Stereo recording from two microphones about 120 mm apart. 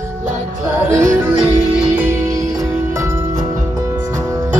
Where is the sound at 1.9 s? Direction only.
20° right (ahead or behind).